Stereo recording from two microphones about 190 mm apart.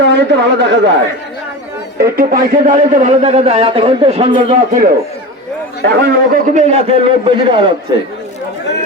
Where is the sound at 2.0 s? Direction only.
50° right (ahead or behind); by 4.5 s 30° right (ahead or behind).